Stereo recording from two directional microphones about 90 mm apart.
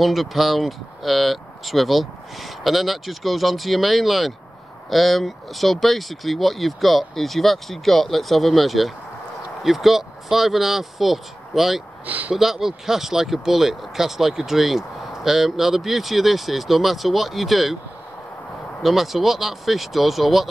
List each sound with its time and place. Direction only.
0.0 s speech: centre (ahead or behind)
12.1 s speech: 20° right (ahead or behind)
12.4 s speech: 5° right (ahead or behind)
18.8 s speech: 5° right (ahead or behind)